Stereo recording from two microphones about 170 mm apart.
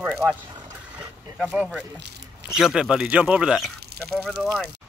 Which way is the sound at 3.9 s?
75° right (ahead or behind).